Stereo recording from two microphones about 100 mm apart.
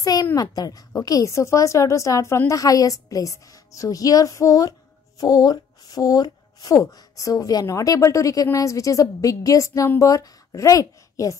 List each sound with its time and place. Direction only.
0.0 s a woman's voice: 35° left (ahead or behind)